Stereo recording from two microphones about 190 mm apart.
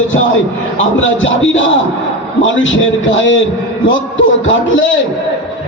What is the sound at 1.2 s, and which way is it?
A man's voice, 90° left.